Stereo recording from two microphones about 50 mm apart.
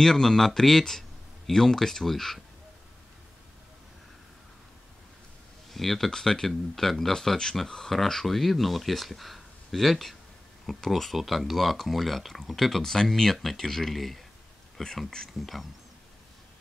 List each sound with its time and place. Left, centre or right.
0.0 s speech: centre
5.7 s speech: centre